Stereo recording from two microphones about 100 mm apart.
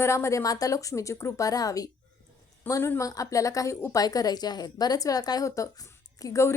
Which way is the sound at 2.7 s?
30° left (ahead or behind).